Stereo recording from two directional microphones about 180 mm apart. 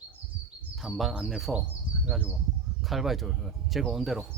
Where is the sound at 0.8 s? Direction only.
Centre (ahead or behind).